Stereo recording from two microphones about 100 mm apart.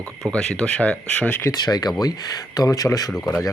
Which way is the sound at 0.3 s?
10° left (ahead or behind).